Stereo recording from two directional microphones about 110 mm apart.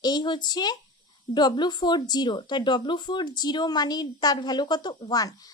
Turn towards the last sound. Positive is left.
turn(degrees=35)  # may be behind; listen again after turning